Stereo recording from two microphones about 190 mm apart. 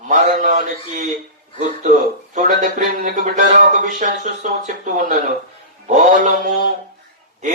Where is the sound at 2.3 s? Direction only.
40° right (ahead or behind).